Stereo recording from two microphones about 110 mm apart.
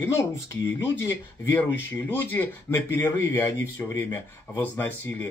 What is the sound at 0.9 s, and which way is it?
Speech, 25° left (ahead or behind).